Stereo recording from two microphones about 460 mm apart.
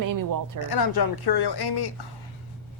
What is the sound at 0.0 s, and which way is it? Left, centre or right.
Speech, right.